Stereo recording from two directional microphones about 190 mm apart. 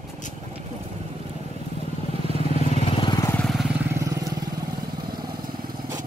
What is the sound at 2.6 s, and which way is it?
Vehicle, 30° left (ahead or behind).